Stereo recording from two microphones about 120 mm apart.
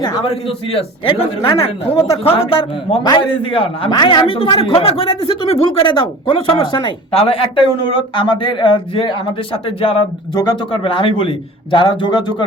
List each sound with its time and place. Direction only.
0.4 s a man's voice: 50° left (ahead or behind)
3.0 s a man's voice: 40° left (ahead or behind)
10.3 s speech: 30° left (ahead or behind)
10.7 s a man's voice: 45° left (ahead or behind)